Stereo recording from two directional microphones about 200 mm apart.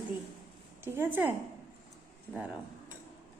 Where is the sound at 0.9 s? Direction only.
10° right (ahead or behind).